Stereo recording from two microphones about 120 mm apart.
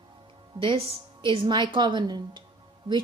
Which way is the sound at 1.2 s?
40° right (ahead or behind).